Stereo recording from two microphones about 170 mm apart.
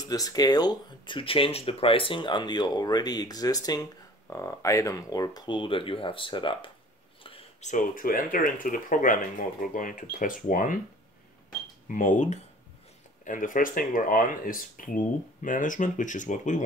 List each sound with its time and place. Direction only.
0.1 s speech: 20° left (ahead or behind)
7.2 s a sound: 35° left (ahead or behind)
7.7 s speech: 55° left (ahead or behind)
11.9 s speech: 50° left (ahead or behind)